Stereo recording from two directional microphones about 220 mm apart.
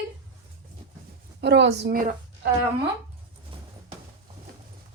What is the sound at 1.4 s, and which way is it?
A woman's voice, 50° right (ahead or behind).